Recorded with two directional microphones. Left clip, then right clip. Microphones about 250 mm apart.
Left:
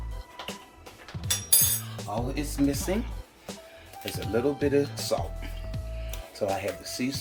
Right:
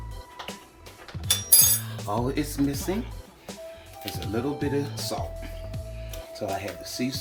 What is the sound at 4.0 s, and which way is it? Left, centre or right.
Speech, centre.